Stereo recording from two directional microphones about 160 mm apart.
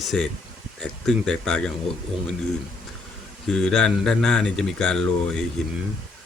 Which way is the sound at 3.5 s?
5° left (ahead or behind).